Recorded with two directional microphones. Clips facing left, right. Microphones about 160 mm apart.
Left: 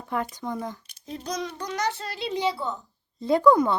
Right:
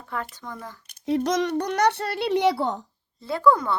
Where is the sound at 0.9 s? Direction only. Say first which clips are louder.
Right 10 dB; 75° right (ahead or behind).